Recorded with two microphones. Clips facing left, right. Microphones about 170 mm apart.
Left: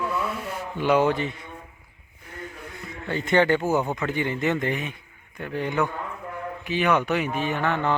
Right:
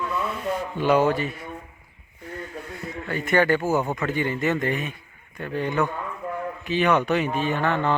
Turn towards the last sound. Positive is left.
turn(degrees=15)  # may be behind; listen again after turning